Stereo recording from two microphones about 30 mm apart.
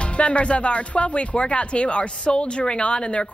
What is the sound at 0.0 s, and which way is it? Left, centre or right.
A woman's voice, left.